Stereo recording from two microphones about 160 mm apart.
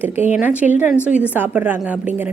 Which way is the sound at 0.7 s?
10° right (ahead or behind).